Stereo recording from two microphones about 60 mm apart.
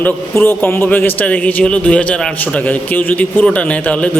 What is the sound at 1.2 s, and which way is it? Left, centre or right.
A man's voice, left.